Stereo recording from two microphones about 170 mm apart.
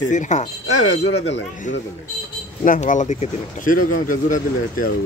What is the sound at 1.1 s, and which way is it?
Speech, 90° left.